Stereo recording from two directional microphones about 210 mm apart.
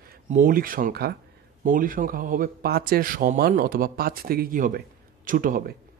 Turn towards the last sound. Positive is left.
turn(degrees=-40)  # may be behind; listen again after turning